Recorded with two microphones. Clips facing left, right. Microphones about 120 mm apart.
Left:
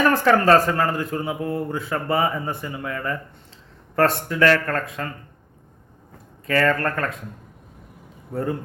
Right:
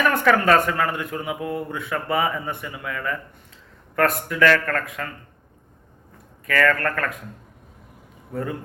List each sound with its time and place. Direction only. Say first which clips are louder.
0.1 s a man's voice: left 2 dB; 30° left (ahead or behind)
6.5 s speech: left 1 dB; 30° left (ahead or behind)
8.3 s a man's voice: left 3 dB; 30° left (ahead or behind)